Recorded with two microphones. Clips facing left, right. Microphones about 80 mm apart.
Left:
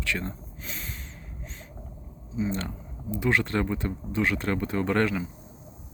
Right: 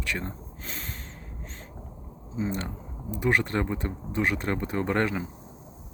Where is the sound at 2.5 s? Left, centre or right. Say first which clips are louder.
Even; right.